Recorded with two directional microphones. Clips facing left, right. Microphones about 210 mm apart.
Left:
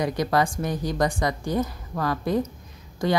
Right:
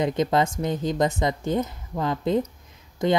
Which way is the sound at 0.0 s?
20° right (ahead or behind).